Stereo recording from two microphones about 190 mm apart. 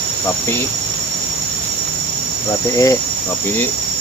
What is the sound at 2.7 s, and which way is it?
Speech, 15° left (ahead or behind).